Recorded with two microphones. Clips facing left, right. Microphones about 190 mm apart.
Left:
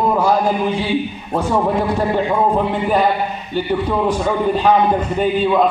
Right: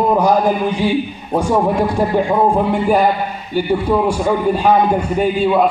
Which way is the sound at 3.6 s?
10° right (ahead or behind).